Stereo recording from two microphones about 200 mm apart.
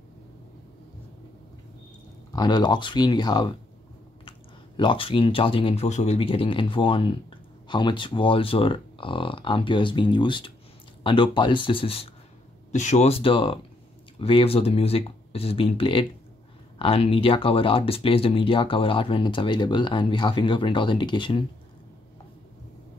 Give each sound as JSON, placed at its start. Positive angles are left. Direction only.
{"t": 2.3, "sound": "speech", "side_deg": 20}